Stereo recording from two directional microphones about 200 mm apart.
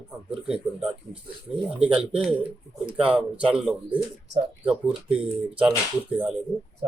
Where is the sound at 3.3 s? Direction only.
5° right (ahead or behind).